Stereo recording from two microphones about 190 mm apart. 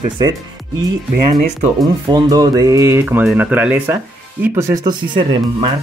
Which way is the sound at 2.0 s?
20° right (ahead or behind).